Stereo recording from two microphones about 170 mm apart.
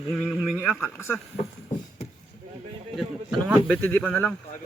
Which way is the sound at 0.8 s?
15° left (ahead or behind).